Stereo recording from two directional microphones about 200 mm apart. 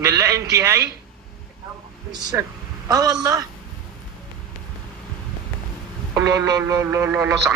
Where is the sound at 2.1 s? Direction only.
20° right (ahead or behind).